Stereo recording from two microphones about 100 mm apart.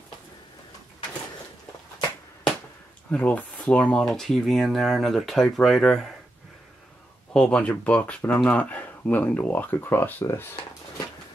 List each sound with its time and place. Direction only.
3.1 s speech: 15° left (ahead or behind)
7.3 s speech: 10° left (ahead or behind)